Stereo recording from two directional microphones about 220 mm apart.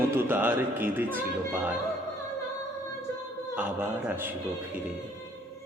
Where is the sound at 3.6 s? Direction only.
10° right (ahead or behind).